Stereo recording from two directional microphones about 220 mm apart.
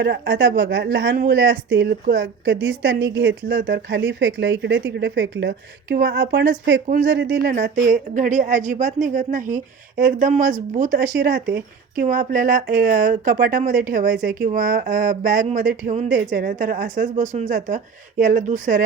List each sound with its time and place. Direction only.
0.0 s speech: 55° right (ahead or behind)
8.1 s speech: 35° right (ahead or behind)
11.3 s speech: 55° right (ahead or behind)
11.9 s speech: 35° right (ahead or behind)